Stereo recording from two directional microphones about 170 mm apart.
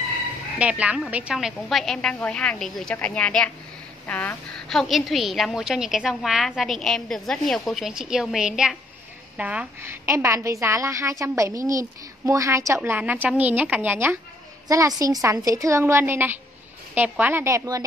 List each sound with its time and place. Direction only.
0.6 s a woman's voice: 5° right (ahead or behind)